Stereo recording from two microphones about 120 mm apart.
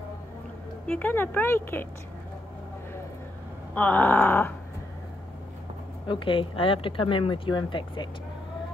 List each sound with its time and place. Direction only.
0.8 s speech: 15° left (ahead or behind)
3.7 s speech: 15° left (ahead or behind)
6.0 s speech: 45° left (ahead or behind)